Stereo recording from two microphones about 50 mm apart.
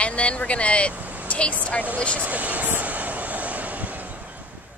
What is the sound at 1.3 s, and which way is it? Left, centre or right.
Speech, left.